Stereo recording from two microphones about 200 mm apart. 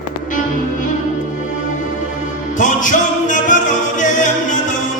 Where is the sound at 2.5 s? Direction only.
40° left (ahead or behind).